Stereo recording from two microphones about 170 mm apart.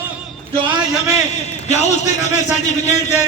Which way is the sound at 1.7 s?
40° left (ahead or behind).